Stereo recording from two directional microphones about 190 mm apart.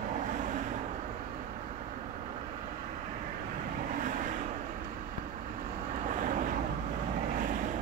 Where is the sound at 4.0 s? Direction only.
45° right (ahead or behind).